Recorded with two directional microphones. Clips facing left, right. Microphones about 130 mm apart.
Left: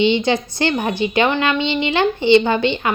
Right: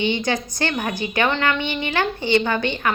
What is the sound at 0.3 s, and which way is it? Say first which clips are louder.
A woman's voice: left 5 dB; 20° left (ahead or behind).